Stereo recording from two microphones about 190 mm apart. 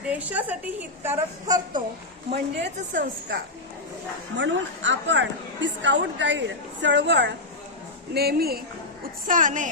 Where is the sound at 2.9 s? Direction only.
55° right (ahead or behind).